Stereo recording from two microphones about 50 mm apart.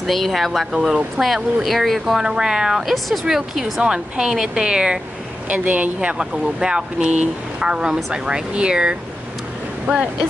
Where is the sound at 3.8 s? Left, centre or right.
Centre.